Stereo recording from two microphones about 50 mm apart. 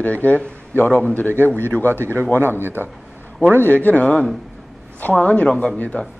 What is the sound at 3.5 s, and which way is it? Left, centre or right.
Speech, left.